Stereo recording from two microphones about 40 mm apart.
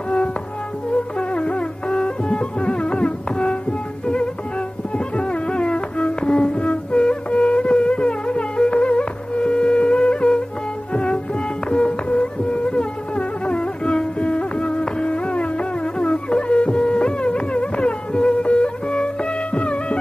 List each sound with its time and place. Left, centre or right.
1.3 s music: left
4.9 s music: left